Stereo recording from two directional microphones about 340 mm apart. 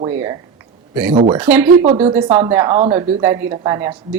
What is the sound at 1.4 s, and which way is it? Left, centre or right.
Speech, centre.